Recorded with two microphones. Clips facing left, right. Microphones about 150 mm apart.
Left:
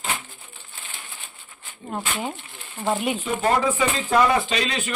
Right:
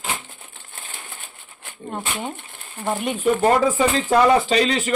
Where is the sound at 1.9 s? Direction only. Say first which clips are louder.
Even; 5° left (ahead or behind).